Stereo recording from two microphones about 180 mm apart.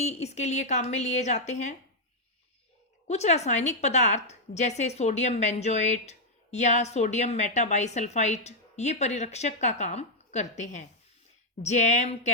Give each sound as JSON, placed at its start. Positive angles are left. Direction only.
{"t": 0.0, "sound": "a woman's voice", "side_deg": 35}
{"t": 3.1, "sound": "a woman's voice", "side_deg": 40}